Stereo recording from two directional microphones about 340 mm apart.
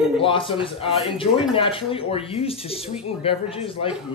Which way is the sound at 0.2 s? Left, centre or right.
Centre.